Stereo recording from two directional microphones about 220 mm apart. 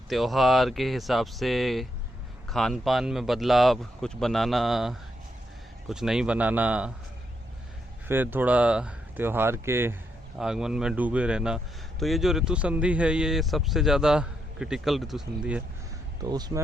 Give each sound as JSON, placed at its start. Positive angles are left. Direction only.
{"t": 0.1, "sound": "speech", "side_deg": 0}
{"t": 8.0, "sound": "speech", "side_deg": -10}
{"t": 16.2, "sound": "speech", "side_deg": -20}